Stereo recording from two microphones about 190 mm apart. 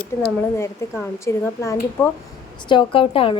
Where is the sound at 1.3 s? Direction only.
15° left (ahead or behind).